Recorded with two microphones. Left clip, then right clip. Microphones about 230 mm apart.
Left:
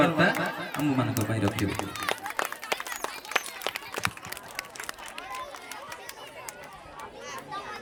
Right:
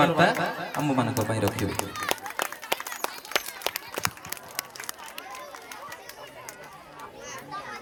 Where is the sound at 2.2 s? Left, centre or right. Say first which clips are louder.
Even; left.